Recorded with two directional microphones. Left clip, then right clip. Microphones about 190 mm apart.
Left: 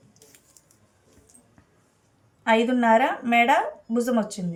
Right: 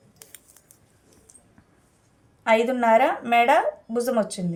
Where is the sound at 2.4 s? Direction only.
35° right (ahead or behind).